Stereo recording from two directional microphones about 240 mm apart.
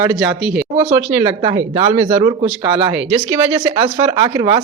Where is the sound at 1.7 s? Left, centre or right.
Right.